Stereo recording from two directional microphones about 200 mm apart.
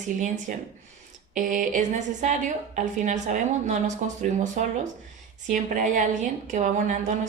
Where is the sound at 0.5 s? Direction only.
40° right (ahead or behind).